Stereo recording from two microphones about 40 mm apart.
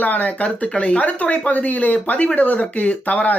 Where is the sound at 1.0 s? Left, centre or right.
Left.